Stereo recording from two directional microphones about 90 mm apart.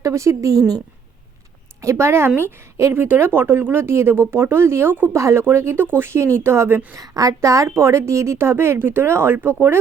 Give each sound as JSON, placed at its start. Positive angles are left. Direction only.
{"t": 0.0, "sound": "a woman's voice", "side_deg": -35}
{"t": 1.8, "sound": "a woman's voice", "side_deg": -30}
{"t": 6.9, "sound": "a woman's voice", "side_deg": -45}